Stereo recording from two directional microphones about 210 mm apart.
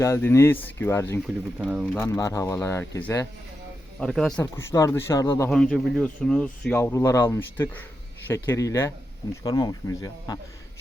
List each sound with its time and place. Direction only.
0.0 s speech: 10° left (ahead or behind)
1.5 s speech: 5° right (ahead or behind)
2.0 s speech: 15° left (ahead or behind)
4.0 s speech: centre (ahead or behind)
5.5 s speech: centre (ahead or behind); by 10.3 s 20° left (ahead or behind)